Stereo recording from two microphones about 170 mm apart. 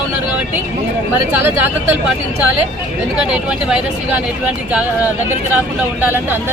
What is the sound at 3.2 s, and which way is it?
Speech, 5° right (ahead or behind).